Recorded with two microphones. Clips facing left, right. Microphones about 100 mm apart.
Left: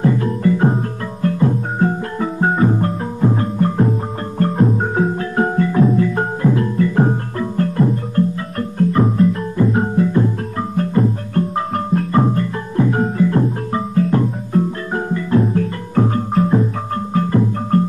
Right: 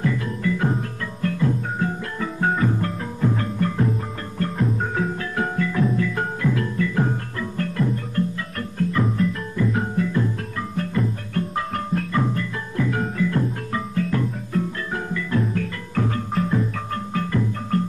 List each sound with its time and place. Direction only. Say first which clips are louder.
0.0 s music: left 8 dB; 35° left (ahead or behind)